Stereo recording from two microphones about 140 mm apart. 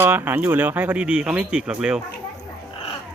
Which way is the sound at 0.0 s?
15° right (ahead or behind).